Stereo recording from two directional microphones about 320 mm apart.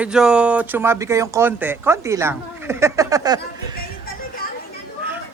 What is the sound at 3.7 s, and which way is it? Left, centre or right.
Music, left.